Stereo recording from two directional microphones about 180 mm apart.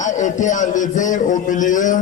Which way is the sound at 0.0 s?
45° left (ahead or behind).